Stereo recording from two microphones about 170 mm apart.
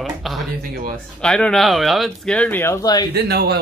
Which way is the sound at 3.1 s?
70° right (ahead or behind).